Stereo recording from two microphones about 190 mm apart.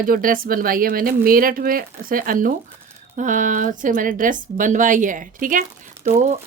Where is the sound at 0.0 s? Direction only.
50° right (ahead or behind).